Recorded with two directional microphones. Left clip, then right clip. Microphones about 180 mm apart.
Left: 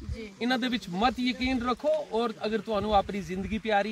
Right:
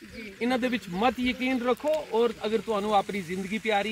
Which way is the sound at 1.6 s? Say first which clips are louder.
Right 1 dB; 20° left (ahead or behind).